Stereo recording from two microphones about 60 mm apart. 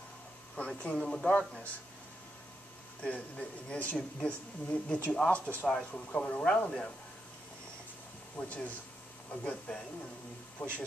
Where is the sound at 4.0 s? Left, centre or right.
Centre.